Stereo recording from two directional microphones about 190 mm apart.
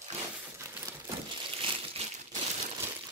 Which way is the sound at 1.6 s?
30° right (ahead or behind).